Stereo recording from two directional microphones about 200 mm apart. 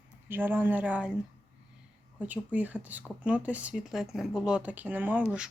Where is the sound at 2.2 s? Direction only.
5° right (ahead or behind).